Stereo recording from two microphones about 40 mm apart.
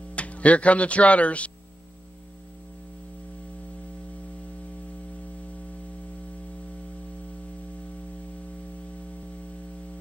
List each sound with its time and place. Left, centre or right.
0.1 s speech: left